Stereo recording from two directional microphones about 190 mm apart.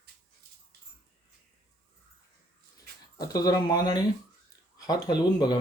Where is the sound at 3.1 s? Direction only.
20° left (ahead or behind).